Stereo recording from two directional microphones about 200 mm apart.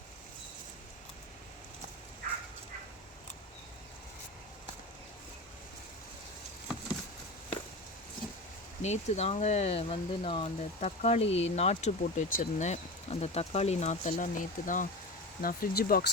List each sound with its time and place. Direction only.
8.8 s speech: 35° left (ahead or behind)